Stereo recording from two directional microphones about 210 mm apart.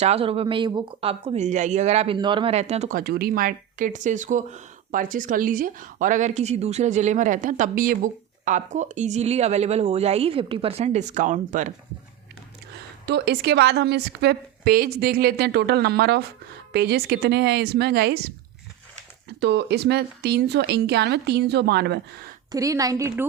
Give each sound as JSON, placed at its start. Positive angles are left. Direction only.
{"t": 0.0, "sound": "speech", "side_deg": -30}
{"t": 3.0, "sound": "speech", "side_deg": -45}
{"t": 13.1, "sound": "a woman's voice", "side_deg": -50}
{"t": 19.4, "sound": "a woman's voice", "side_deg": -55}
{"t": 22.5, "sound": "a woman's voice", "side_deg": -15}